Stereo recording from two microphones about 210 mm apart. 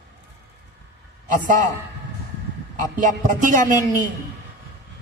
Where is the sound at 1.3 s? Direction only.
40° right (ahead or behind).